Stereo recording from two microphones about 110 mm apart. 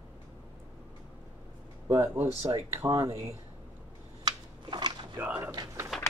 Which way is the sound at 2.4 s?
30° right (ahead or behind).